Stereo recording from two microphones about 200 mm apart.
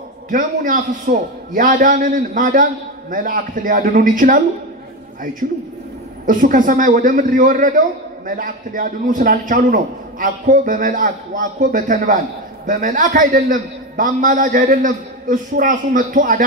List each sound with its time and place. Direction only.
0.3 s a man's voice: 40° right (ahead or behind)
5.4 s a man's voice: 40° right (ahead or behind)